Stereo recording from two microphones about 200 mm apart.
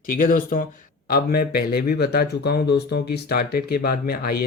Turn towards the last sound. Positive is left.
turn(degrees=50)  # may be behind; listen again after turning